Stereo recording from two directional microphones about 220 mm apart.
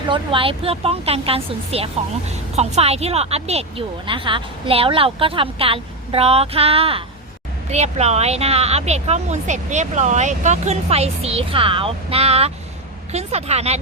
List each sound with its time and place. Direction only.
0.1 s speech: 25° right (ahead or behind)